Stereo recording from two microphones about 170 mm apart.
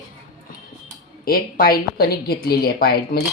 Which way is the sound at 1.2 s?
60° left (ahead or behind).